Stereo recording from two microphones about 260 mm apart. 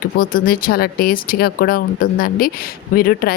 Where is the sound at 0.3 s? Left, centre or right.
Left.